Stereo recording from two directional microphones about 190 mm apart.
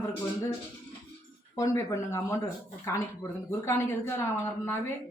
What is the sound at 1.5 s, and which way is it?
Speech, 15° left (ahead or behind).